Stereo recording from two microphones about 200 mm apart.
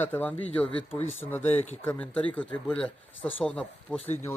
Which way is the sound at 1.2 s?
20° left (ahead or behind).